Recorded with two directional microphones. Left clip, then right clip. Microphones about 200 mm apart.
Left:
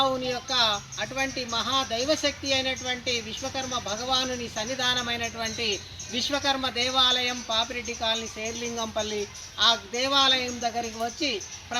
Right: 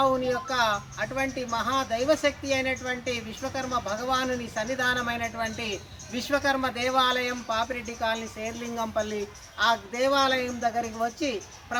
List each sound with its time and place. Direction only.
0.0 s speech: 10° right (ahead or behind)